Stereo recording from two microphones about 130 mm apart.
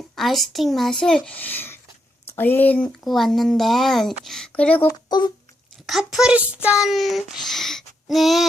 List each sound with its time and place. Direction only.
0.2 s a child's voice: centre (ahead or behind)
4.9 s a child's voice: 30° left (ahead or behind)
5.8 s a child's voice: centre (ahead or behind)